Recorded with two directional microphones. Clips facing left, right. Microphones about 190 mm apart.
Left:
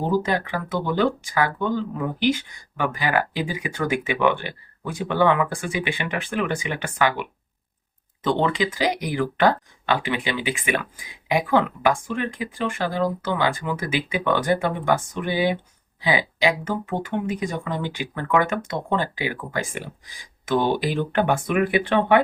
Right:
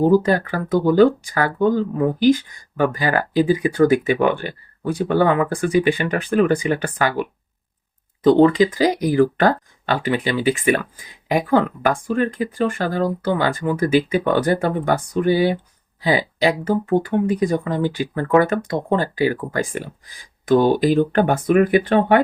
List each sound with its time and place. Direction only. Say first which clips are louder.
0.0 s speech: right 7 dB; 45° right (ahead or behind)